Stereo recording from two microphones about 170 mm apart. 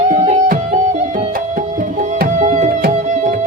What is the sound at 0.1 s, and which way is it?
Music, 45° right (ahead or behind).